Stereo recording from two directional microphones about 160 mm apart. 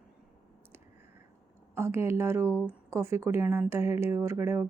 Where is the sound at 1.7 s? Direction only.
15° right (ahead or behind).